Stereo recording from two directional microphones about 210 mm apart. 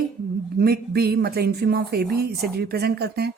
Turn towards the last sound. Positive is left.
turn(degrees=-50)  # may be behind; listen again after turning